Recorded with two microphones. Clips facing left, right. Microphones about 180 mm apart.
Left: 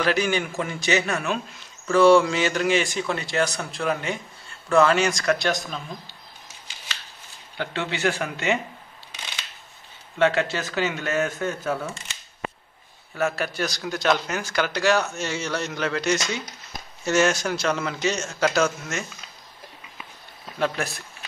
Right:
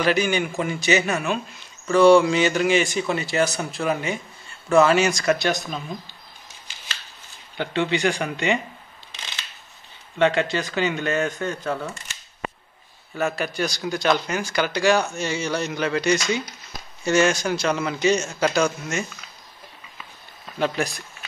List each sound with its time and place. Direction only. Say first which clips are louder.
0.0 s speech: right 2 dB; centre (ahead or behind)
7.5 s speech: right 5 dB; centre (ahead or behind)
10.1 s speech: right 1 dB; 5° left (ahead or behind)
13.1 s speech: even; centre (ahead or behind)
20.5 s speech: right 2 dB; centre (ahead or behind)